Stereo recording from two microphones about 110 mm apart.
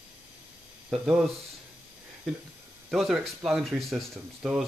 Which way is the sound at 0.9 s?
5° right (ahead or behind).